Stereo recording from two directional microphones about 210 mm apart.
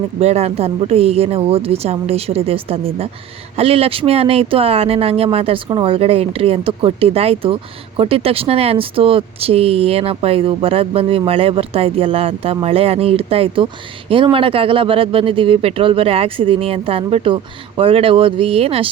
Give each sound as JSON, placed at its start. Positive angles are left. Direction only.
{"t": 0.2, "sound": "speech", "side_deg": -30}